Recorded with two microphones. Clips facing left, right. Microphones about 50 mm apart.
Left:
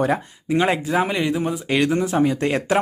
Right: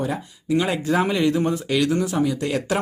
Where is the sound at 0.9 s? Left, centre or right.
Centre.